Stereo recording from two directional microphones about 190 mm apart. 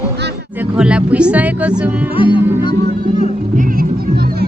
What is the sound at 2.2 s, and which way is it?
Speech, 25° left (ahead or behind).